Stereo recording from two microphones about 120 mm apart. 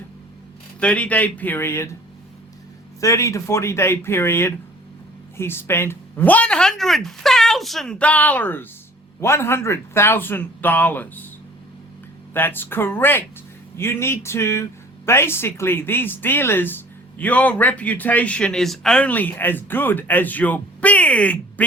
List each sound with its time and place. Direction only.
0.8 s speech: 10° left (ahead or behind)
3.0 s speech: 25° left (ahead or behind)
12.3 s speech: 15° left (ahead or behind)